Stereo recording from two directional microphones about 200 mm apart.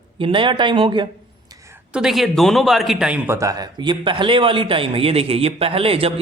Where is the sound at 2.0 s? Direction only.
Centre (ahead or behind).